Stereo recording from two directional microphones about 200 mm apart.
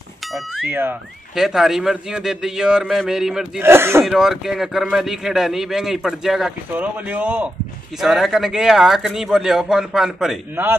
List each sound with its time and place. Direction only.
0.2 s speech: centre (ahead or behind)
0.7 s a man's voice: 10° right (ahead or behind)
4.0 s a man's voice: centre (ahead or behind)